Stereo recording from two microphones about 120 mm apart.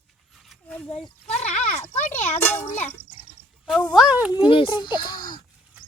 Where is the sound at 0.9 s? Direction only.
65° left (ahead or behind).